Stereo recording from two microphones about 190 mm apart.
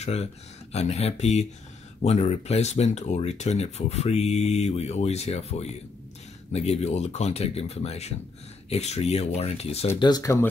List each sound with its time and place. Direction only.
0.0 s speech: 35° left (ahead or behind)
9.9 s speech: 20° left (ahead or behind)